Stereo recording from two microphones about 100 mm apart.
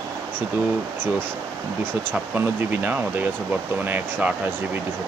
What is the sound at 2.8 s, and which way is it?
Speech, 15° right (ahead or behind).